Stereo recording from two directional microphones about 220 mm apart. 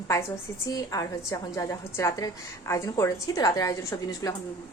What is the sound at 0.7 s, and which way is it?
A woman's voice, 15° left (ahead or behind).